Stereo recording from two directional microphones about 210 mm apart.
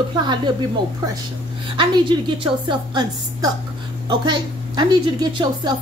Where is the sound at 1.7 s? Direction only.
25° right (ahead or behind).